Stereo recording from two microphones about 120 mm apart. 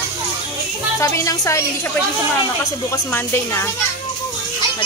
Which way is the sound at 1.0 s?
25° left (ahead or behind).